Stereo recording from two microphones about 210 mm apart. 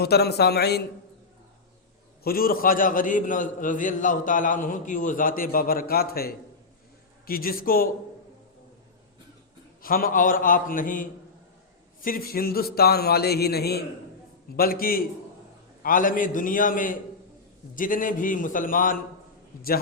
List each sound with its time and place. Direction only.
0.0 s speech: 50° left (ahead or behind)
2.2 s a man's voice: 45° left (ahead or behind)
9.8 s a man's voice: 45° left (ahead or behind)